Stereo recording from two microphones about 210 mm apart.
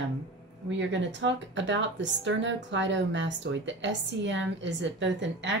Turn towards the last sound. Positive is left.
turn(degrees=-60)  # may be behind; listen again after turning